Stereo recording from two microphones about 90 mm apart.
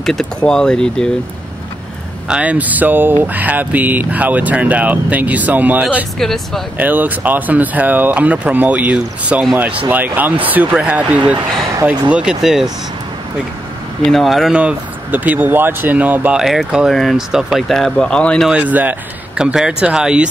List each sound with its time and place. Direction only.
0.0 s speech: 5° left (ahead or behind)
2.2 s speech: 10° right (ahead or behind)
6.1 s speech: 5° left (ahead or behind)
6.8 s speech: 20° right (ahead or behind)
14.0 s speech: centre (ahead or behind)
14.6 s speech: 15° right (ahead or behind)
16.3 s speech: 5° right (ahead or behind)
18.5 s speech: 20° right (ahead or behind)
19.3 s speech: 10° right (ahead or behind)